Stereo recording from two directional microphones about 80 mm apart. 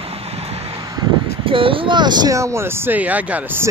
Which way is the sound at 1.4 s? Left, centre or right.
Right.